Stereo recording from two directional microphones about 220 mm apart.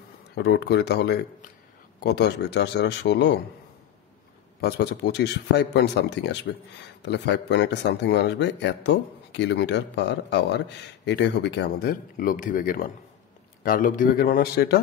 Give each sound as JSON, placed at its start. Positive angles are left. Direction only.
{"t": 0.4, "sound": "speech", "side_deg": 50}
{"t": 4.6, "sound": "speech", "side_deg": 45}